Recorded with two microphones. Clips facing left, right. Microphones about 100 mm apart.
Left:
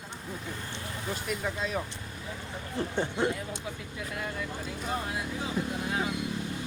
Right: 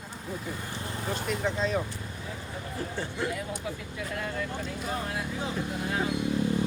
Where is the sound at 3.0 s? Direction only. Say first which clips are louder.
Left 4 dB; 20° left (ahead or behind).